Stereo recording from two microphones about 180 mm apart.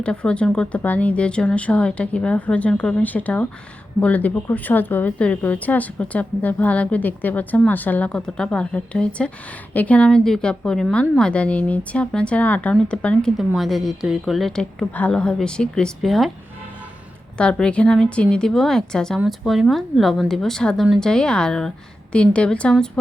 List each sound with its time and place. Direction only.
0.0 s a woman's voice: 5° left (ahead or behind)
17.3 s a woman's voice: 5° left (ahead or behind)